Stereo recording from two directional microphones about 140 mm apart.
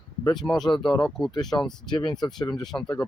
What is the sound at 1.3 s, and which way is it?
Speech, 30° left (ahead or behind).